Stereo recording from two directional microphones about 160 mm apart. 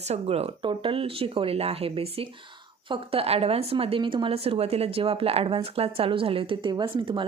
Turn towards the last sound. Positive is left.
turn(degrees=-30)  # may be behind; listen again after turning